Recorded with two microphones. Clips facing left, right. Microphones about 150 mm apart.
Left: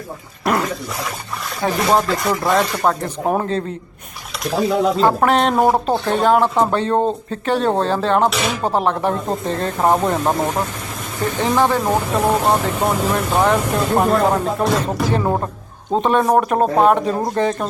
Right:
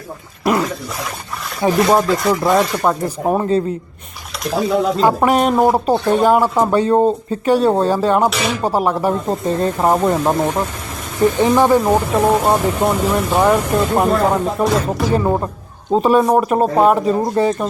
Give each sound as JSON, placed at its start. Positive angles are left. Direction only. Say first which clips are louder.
{"t": 0.4, "sound": "a sound", "louder": "right 2 dB", "side_deg": 0}
{"t": 1.7, "sound": "speech", "louder": "right 3 dB", "side_deg": 0}
{"t": 11.5, "sound": "speech", "louder": "right 2 dB", "side_deg": -10}
{"t": 11.8, "sound": "speech", "louder": "right 3 dB", "side_deg": 0}